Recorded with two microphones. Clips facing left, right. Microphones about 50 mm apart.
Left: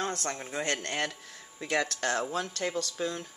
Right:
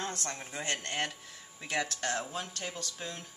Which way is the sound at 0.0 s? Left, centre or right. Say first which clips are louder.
Left 5 dB; left.